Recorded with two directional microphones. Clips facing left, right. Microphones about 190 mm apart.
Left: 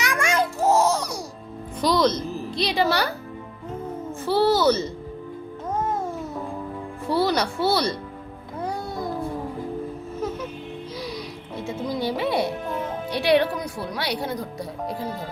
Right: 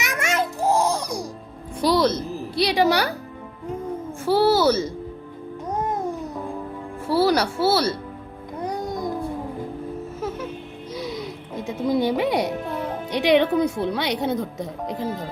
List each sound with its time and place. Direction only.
0.0 s babbling: 25° right (ahead or behind)
1.8 s a woman's voice: 10° right (ahead or behind)
4.3 s a child's voice: 10° right (ahead or behind)
5.7 s babbling: 15° right (ahead or behind)
7.1 s a child's voice: 5° right (ahead or behind)
8.6 s music: 15° right (ahead or behind)
10.9 s music: 20° right (ahead or behind)
13.1 s speech: 20° right (ahead or behind)